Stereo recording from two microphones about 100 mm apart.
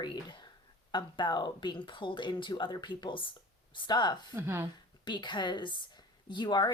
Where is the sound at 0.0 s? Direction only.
50° left (ahead or behind).